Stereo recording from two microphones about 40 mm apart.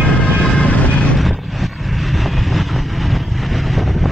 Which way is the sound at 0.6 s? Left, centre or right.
Left.